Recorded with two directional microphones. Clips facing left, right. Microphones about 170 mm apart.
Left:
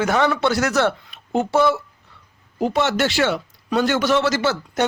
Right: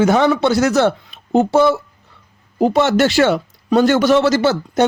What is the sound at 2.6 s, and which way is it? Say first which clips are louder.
A man's voice: right 6 dB; 40° right (ahead or behind).